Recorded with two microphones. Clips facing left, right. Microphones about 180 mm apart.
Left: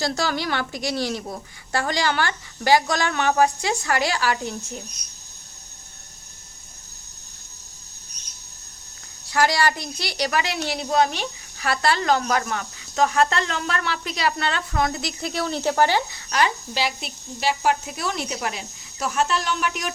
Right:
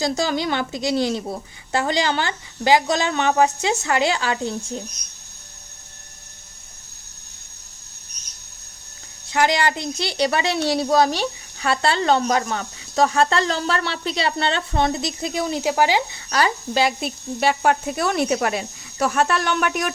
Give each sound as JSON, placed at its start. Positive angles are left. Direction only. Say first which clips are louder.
{"t": 0.0, "sound": "speech", "louder": "right 3 dB", "side_deg": -20}
{"t": 9.3, "sound": "speech", "louder": "right 1 dB", "side_deg": -20}
{"t": 16.1, "sound": "speech", "louder": "right 1 dB", "side_deg": -35}
{"t": 16.7, "sound": "speech", "louder": "right 6 dB", "side_deg": -50}